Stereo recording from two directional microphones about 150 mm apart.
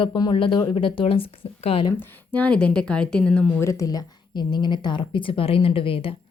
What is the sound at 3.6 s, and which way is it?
A woman's voice, 20° left (ahead or behind).